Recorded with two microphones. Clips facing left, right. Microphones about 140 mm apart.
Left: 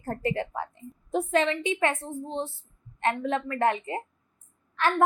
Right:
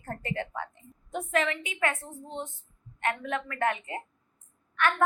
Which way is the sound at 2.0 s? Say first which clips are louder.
Left 6 dB; 30° left (ahead or behind).